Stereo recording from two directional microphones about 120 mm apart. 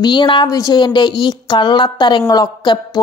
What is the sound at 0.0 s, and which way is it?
Speech, 40° left (ahead or behind).